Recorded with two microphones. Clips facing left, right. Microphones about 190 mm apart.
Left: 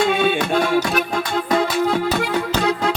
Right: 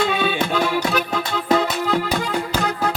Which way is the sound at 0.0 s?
50° left (ahead or behind).